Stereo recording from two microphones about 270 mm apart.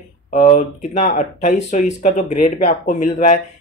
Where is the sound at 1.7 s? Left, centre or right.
Left.